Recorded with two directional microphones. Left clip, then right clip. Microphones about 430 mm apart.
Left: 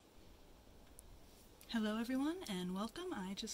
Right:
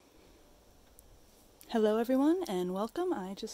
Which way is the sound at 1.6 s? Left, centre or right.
Centre.